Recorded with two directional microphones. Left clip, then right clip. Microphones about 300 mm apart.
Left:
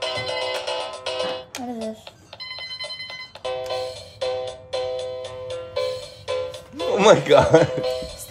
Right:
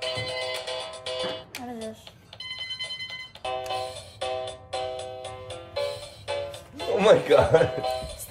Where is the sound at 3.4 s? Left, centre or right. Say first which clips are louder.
Left 3 dB; centre.